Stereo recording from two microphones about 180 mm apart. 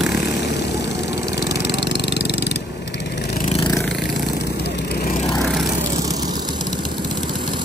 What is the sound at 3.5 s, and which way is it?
Vehicle, 30° left (ahead or behind).